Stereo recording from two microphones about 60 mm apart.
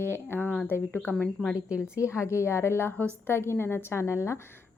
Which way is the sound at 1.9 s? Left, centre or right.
Left.